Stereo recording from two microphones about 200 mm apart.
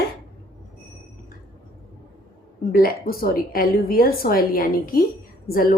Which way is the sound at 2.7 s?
50° left (ahead or behind).